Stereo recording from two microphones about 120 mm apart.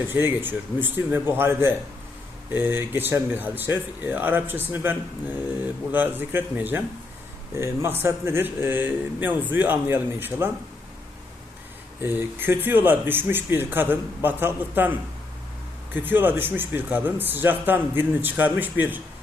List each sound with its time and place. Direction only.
0.1 s speech: 15° right (ahead or behind)
12.0 s speech: 20° right (ahead or behind)
16.0 s speech: 15° right (ahead or behind)